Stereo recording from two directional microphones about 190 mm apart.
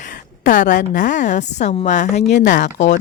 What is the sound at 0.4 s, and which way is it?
A woman's voice, 45° left (ahead or behind).